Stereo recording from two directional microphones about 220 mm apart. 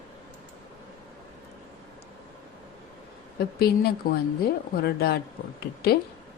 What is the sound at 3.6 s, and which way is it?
Speech, 45° left (ahead or behind).